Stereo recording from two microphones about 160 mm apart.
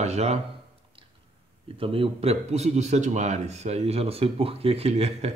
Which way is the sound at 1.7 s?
35° right (ahead or behind).